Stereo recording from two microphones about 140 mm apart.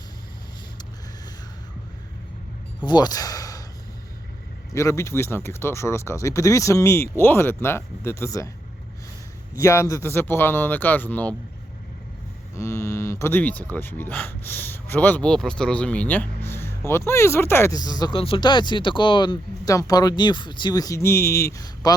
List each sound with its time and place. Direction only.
2.8 s speech: 30° left (ahead or behind)
4.7 s speech: 20° left (ahead or behind)
9.6 s speech: 25° left (ahead or behind)
12.5 s speech: 20° left (ahead or behind)